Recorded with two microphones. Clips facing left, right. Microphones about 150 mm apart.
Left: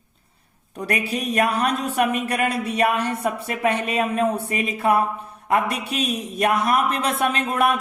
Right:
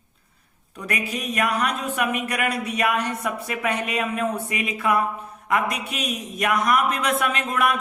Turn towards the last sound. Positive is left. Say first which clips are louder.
# left 2 dB
turn(degrees=35)  # may be behind; listen again after turning